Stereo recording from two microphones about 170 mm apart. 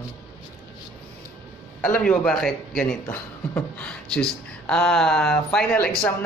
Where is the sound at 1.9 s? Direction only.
5° left (ahead or behind).